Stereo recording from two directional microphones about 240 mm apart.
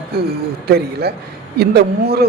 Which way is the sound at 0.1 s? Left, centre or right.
Right.